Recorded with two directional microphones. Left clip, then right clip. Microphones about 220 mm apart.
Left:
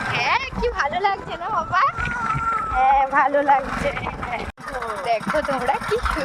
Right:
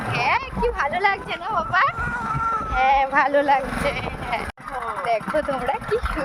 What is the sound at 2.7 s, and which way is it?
Speech, 20° right (ahead or behind).